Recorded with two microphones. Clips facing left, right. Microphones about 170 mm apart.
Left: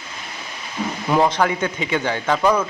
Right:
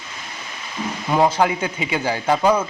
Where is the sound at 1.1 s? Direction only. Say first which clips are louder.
Right 1 dB; 5° right (ahead or behind).